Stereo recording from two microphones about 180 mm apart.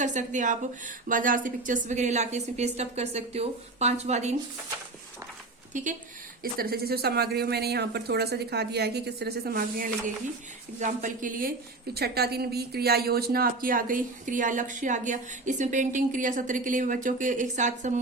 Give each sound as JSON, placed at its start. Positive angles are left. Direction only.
{"t": 0.0, "sound": "a woman's voice", "side_deg": -40}
{"t": 5.7, "sound": "speech", "side_deg": -45}
{"t": 6.4, "sound": "speech", "side_deg": -55}
{"t": 11.9, "sound": "speech", "side_deg": -60}